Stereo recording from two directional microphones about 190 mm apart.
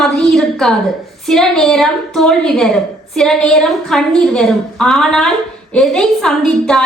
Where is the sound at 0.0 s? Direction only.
5° left (ahead or behind).